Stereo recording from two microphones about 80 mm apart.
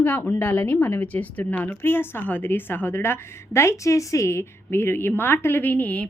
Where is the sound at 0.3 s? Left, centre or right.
Left.